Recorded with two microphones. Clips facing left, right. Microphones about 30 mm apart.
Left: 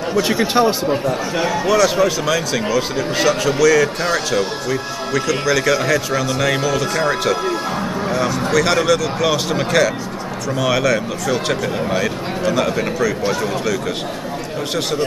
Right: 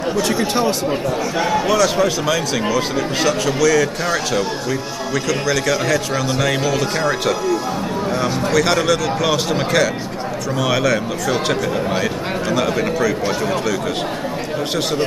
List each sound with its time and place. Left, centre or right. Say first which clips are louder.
0.2 s speech: left 4 dB; centre
1.4 s speech: left 1 dB; centre